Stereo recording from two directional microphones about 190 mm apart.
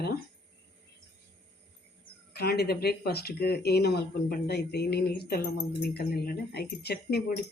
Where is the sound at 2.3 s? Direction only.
55° left (ahead or behind).